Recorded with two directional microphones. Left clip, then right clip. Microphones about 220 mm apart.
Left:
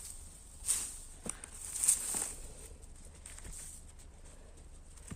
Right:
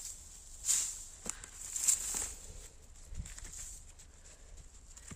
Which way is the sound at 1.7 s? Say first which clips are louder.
Right 1 dB; centre (ahead or behind).